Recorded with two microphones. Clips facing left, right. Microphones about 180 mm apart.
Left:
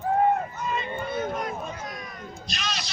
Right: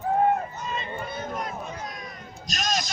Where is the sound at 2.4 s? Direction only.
45° right (ahead or behind).